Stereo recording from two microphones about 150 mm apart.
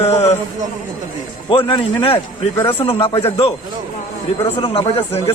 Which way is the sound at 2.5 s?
20° left (ahead or behind).